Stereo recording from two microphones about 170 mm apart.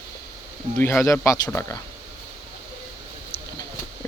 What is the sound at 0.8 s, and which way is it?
Speech, 15° left (ahead or behind).